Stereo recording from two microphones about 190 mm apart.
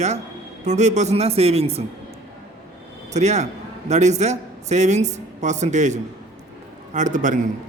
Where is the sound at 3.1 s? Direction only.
35° right (ahead or behind).